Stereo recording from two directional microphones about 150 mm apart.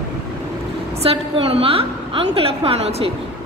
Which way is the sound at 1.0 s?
40° right (ahead or behind).